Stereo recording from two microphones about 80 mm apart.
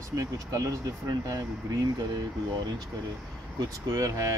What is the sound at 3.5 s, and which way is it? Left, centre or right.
Speech, right.